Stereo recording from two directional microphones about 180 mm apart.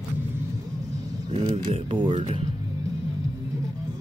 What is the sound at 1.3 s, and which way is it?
Speech, 35° right (ahead or behind).